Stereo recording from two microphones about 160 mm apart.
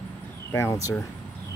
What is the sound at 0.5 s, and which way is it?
Speech, 15° left (ahead or behind).